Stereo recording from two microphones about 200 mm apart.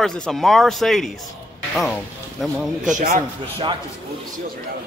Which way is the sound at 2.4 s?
Centre (ahead or behind).